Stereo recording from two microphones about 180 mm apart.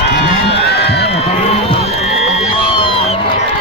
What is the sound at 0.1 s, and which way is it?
Crowd, 65° left (ahead or behind).